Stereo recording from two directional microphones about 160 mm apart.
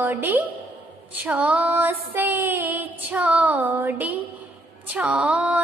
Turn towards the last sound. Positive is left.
turn(degrees=-10)  # may be behind; listen again after turning